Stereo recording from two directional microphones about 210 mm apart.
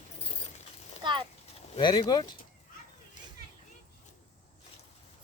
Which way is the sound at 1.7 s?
20° left (ahead or behind).